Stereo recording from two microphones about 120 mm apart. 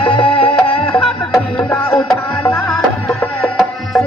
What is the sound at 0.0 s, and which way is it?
Music, 45° left (ahead or behind).